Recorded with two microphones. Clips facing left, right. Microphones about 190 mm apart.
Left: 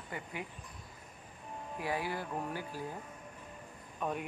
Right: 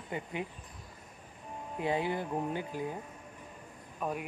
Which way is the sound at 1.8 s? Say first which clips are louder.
Right 5 dB; 20° right (ahead or behind).